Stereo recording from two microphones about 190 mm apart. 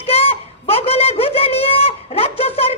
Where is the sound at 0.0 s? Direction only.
30° left (ahead or behind).